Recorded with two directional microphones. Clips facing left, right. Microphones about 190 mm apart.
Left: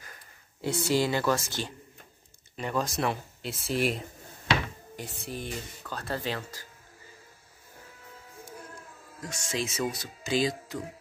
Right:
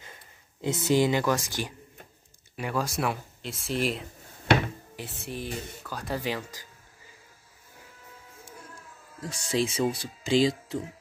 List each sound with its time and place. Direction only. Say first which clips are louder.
0.0 s speech: right 2 dB; 20° right (ahead or behind)
9.2 s speech: right 5 dB; 35° right (ahead or behind)